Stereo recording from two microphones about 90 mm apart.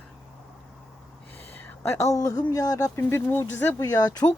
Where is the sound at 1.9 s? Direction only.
35° left (ahead or behind).